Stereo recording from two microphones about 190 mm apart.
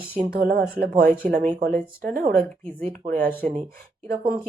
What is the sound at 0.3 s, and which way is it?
Speech, 50° right (ahead or behind).